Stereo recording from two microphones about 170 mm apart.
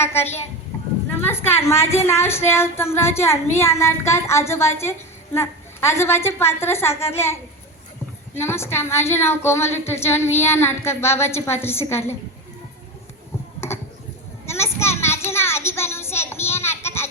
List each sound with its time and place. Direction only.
0.0 s a woman's voice: 15° left (ahead or behind)
0.7 s a sound: 15° left (ahead or behind)
1.3 s a woman's voice: 15° left (ahead or behind)
8.4 s a woman's voice: 15° left (ahead or behind)
13.6 s a sound: 15° left (ahead or behind)
14.4 s child singing: 15° left (ahead or behind)